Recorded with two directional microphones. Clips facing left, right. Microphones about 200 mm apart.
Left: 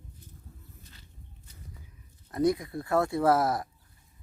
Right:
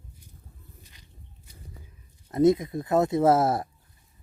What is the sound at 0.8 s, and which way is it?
Walk, 15° right (ahead or behind).